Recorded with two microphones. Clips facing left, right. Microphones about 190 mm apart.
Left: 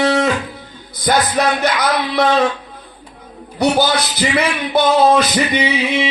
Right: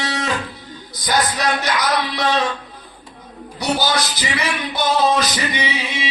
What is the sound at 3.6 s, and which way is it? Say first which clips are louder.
Speech: left 5 dB; 55° left (ahead or behind).